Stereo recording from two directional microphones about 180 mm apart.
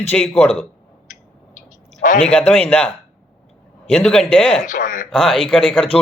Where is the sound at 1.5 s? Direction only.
45° left (ahead or behind).